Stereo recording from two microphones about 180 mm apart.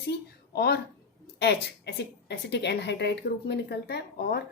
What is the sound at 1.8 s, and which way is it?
Speech, 70° left (ahead or behind).